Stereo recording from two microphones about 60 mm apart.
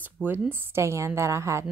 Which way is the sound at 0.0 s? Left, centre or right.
Right.